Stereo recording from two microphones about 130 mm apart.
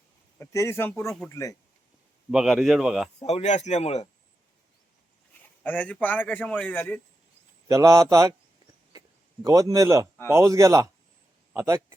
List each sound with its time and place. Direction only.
0.3 s speech: 20° left (ahead or behind)
2.3 s speech: 5° right (ahead or behind)
3.2 s speech: 55° left (ahead or behind)
5.4 s a man's voice: 10° left (ahead or behind)
7.7 s speech: 25° right (ahead or behind)
8.9 s a sound: 30° right (ahead or behind)
10.2 s speech: 20° right (ahead or behind)